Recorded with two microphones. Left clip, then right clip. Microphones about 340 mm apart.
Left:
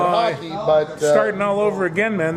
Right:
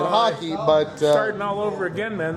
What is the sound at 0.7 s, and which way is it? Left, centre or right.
Speech, right.